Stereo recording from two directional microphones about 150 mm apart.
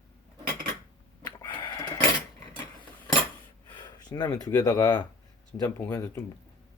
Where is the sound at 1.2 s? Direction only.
30° left (ahead or behind).